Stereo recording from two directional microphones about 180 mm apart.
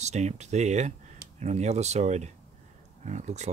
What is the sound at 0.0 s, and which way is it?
Speech, 40° right (ahead or behind).